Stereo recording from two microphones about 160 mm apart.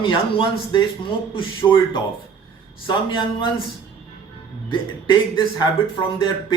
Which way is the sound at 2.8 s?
30° left (ahead or behind).